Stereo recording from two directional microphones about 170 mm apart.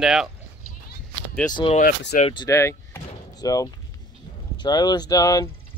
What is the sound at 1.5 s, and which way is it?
Speech, 25° left (ahead or behind).